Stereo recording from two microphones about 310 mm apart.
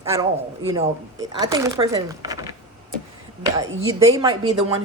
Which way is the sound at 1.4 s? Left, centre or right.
Centre.